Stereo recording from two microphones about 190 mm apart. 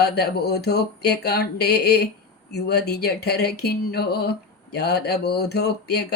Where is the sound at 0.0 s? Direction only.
55° left (ahead or behind).